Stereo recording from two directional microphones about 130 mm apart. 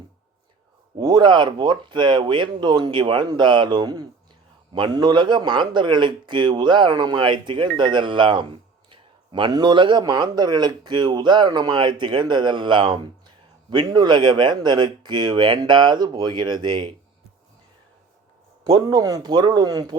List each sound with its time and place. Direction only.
0.9 s speech: 35° right (ahead or behind)
18.6 s speech: 30° right (ahead or behind)